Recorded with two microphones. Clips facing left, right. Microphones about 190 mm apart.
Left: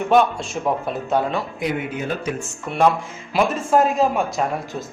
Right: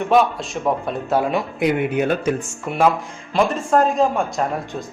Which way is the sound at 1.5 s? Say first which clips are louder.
Right 6 dB; 60° right (ahead or behind).